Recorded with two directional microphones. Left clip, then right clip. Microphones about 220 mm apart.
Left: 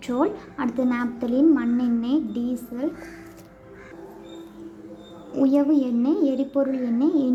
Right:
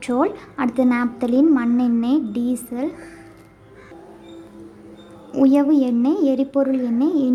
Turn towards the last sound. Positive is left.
turn(degrees=-10)  # may be behind; listen again after turning